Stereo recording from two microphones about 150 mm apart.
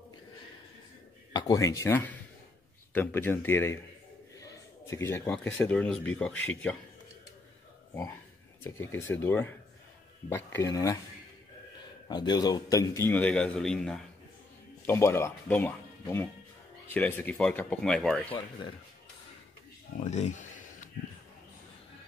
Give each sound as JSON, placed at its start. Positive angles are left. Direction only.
{"t": 1.3, "sound": "a man's voice", "side_deg": 25}
{"t": 4.4, "sound": "a sound", "side_deg": 20}
{"t": 5.3, "sound": "a man's voice", "side_deg": 10}
{"t": 8.6, "sound": "a man's voice", "side_deg": 15}
{"t": 12.1, "sound": "a man's voice", "side_deg": 30}
{"t": 14.9, "sound": "a man's voice", "side_deg": 15}
{"t": 20.0, "sound": "a sound", "side_deg": 50}